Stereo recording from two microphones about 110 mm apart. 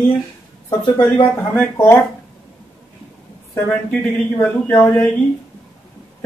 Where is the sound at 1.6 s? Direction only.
25° left (ahead or behind).